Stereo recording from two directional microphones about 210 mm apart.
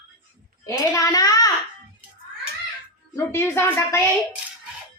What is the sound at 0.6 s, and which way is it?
Speech, 15° left (ahead or behind).